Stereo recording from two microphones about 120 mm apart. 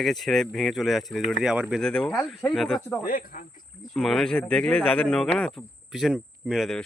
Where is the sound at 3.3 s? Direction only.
90° left.